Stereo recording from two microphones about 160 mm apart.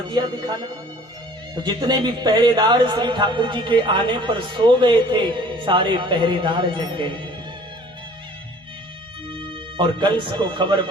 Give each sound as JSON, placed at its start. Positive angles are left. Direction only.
{"t": 0.1, "sound": "a man's voice", "side_deg": -30}
{"t": 9.3, "sound": "speech", "side_deg": -30}